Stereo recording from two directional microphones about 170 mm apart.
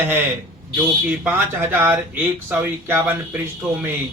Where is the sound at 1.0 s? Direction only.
10° right (ahead or behind).